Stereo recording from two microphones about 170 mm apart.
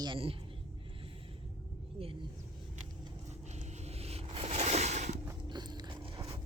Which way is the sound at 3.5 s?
40° right (ahead or behind).